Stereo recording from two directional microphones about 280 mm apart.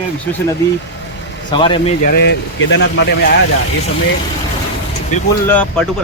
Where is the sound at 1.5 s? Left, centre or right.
Centre.